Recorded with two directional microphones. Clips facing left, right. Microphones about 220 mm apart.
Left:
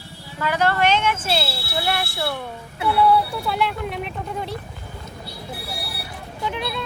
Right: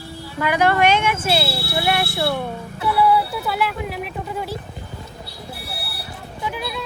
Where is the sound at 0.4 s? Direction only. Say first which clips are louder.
Right 3 dB; 15° right (ahead or behind).